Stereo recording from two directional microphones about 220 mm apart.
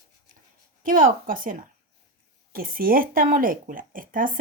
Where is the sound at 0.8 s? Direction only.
40° right (ahead or behind).